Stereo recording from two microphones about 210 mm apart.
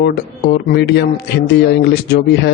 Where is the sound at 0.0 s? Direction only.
50° left (ahead or behind).